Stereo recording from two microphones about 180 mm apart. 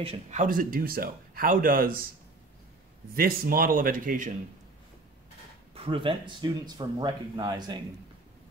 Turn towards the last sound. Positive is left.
turn(degrees=-20)  # may be behind; listen again after turning